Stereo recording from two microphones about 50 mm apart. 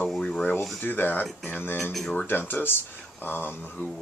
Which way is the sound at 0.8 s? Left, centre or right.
Left.